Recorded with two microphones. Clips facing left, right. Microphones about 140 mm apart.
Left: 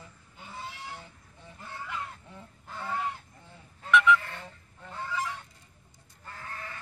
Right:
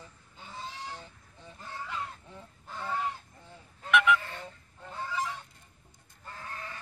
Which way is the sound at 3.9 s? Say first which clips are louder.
Left 2 dB; 60° right (ahead or behind).